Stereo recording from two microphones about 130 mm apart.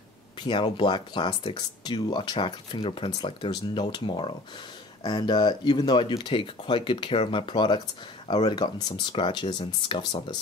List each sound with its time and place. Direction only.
0.4 s speech: 40° left (ahead or behind)